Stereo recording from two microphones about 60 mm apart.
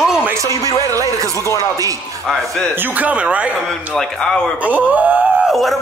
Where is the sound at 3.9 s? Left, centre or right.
Centre.